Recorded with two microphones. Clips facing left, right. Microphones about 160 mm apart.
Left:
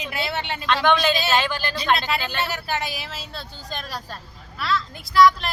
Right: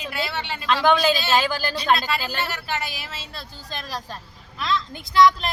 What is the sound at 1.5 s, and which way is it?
Speech, 40° right (ahead or behind).